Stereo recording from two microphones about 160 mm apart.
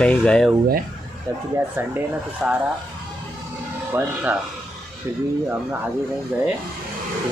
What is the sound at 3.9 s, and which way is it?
Speech, 10° right (ahead or behind).